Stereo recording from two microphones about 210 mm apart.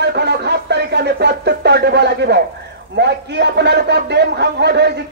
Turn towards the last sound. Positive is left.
turn(degrees=-55)  # may be behind; listen again after turning